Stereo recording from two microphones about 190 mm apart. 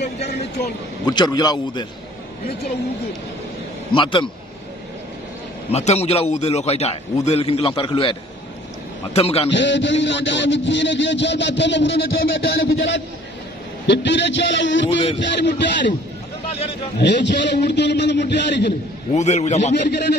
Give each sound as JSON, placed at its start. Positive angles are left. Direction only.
{"t": 1.0, "sound": "a man's voice", "side_deg": 20}
{"t": 3.9, "sound": "a man's voice", "side_deg": 25}
{"t": 5.7, "sound": "a man's voice", "side_deg": 35}
{"t": 9.5, "sound": "speech", "side_deg": 70}
{"t": 17.0, "sound": "a man's voice", "side_deg": 65}
{"t": 19.1, "sound": "a man's voice", "side_deg": 35}
{"t": 19.9, "sound": "a man's voice", "side_deg": 65}